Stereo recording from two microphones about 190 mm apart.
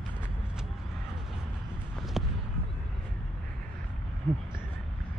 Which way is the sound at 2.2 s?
Centre (ahead or behind).